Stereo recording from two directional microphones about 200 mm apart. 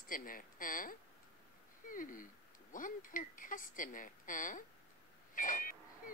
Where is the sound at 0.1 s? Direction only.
45° left (ahead or behind).